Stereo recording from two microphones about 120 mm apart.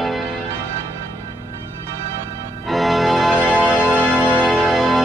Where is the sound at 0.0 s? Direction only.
Centre (ahead or behind).